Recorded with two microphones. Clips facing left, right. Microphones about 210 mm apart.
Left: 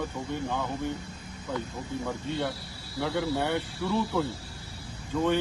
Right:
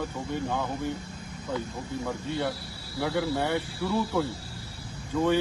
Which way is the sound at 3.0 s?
10° right (ahead or behind).